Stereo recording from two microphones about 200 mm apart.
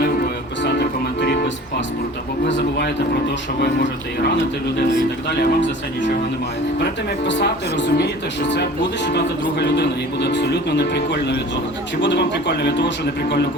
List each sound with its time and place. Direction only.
0.6 s music: 55° left (ahead or behind)
5.4 s speech: 65° left (ahead or behind)
7.3 s speech: 60° left (ahead or behind)
9.0 s speech: 55° left (ahead or behind)